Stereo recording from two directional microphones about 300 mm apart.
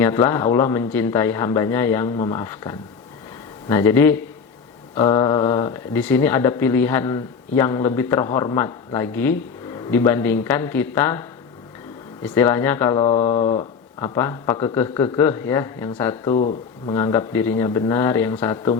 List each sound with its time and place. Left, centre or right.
0.0 s speech: centre
14.0 s speech: centre
16.3 s speech: left
16.9 s speech: centre